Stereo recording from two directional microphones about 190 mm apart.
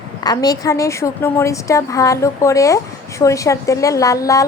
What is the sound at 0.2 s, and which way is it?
A woman's voice, 20° left (ahead or behind).